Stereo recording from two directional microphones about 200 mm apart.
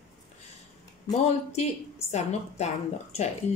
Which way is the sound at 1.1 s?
35° left (ahead or behind).